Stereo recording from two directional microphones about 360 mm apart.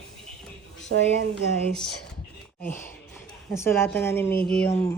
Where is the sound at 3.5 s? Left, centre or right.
Centre.